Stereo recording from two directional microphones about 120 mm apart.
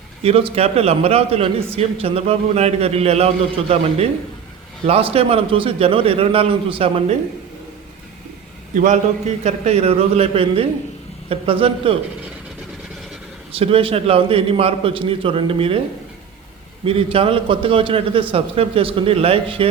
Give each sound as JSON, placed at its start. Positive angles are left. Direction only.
{"t": 0.2, "sound": "a man's voice", "side_deg": -55}
{"t": 8.7, "sound": "a man's voice", "side_deg": -90}
{"t": 9.4, "sound": "a man's voice", "side_deg": -65}
{"t": 13.5, "sound": "a man's voice", "side_deg": -50}
{"t": 16.8, "sound": "a man's voice", "side_deg": -55}